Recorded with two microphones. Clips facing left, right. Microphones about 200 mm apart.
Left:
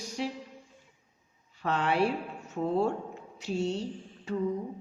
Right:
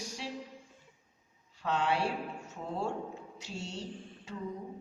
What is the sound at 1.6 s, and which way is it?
Speech, 60° left (ahead or behind).